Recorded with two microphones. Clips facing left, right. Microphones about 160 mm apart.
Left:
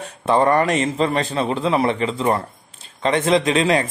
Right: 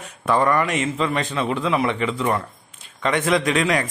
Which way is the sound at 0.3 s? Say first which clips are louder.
Left 3 dB; 30° left (ahead or behind).